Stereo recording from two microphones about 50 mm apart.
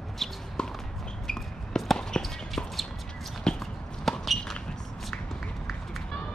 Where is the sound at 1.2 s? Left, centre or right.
Centre.